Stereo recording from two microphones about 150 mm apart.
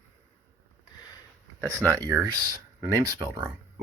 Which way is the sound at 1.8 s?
20° right (ahead or behind).